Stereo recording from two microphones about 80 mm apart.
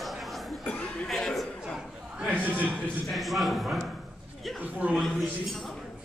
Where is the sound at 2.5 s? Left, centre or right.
Right.